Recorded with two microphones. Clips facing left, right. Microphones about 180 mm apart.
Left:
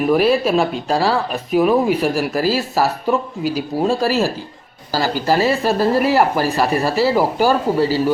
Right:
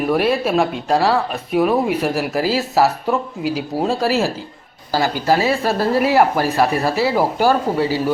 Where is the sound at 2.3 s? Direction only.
15° right (ahead or behind).